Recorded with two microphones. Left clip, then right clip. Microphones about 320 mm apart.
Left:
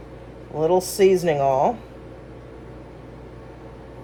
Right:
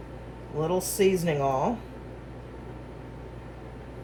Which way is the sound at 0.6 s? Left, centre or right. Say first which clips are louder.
Left 7 dB; left.